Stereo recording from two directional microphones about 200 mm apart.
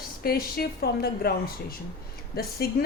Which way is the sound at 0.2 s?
50° left (ahead or behind).